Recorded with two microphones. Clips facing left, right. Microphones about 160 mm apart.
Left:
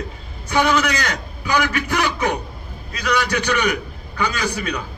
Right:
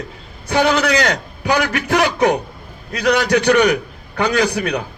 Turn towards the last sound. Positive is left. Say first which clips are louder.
# right 7 dB
turn(degrees=-65)  # may be behind; listen again after turning